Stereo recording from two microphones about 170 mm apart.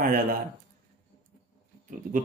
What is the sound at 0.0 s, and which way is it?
Speech, 55° right (ahead or behind).